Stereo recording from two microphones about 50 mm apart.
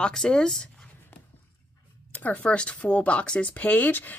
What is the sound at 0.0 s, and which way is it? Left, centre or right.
Speech, centre.